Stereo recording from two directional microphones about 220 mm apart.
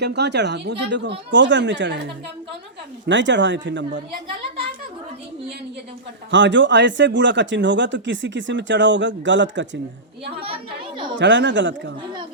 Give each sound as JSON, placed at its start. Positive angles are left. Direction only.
{"t": 0.0, "sound": "speech", "side_deg": -50}
{"t": 6.3, "sound": "speech", "side_deg": -55}
{"t": 10.4, "sound": "chatter", "side_deg": -25}
{"t": 11.2, "sound": "speech", "side_deg": -55}